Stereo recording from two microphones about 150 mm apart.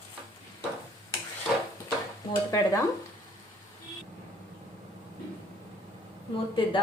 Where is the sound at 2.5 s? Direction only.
25° left (ahead or behind).